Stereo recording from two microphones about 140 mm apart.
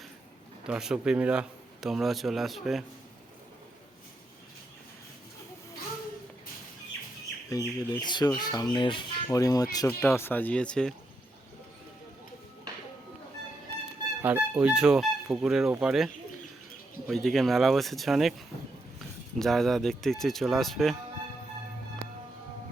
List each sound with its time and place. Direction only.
0.7 s speech: 5° right (ahead or behind)
7.5 s speech: 30° left (ahead or behind)
9.3 s speech: 25° left (ahead or behind)
9.8 s speech: 15° left (ahead or behind)
14.2 s speech: 15° right (ahead or behind)
17.1 s speech: centre (ahead or behind)